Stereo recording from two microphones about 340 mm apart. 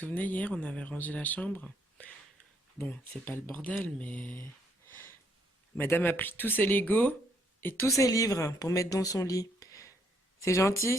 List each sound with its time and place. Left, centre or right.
0.0 s speech: centre
5.7 s speech: centre